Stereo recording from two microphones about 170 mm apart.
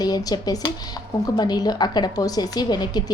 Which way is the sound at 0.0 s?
20° left (ahead or behind).